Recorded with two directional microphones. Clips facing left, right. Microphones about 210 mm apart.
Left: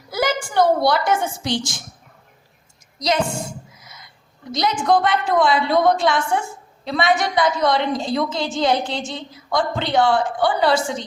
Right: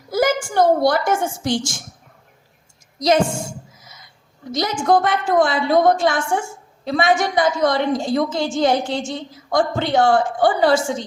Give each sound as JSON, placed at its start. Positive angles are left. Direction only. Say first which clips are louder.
{"t": 0.1, "sound": "a woman's voice", "louder": "right 4 dB", "side_deg": -45}
{"t": 3.8, "sound": "a sound", "louder": "left 1 dB", "side_deg": -50}
{"t": 4.5, "sound": "a woman's voice", "louder": "right 1 dB", "side_deg": -50}